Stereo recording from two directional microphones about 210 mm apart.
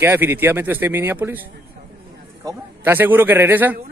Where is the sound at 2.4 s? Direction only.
15° right (ahead or behind).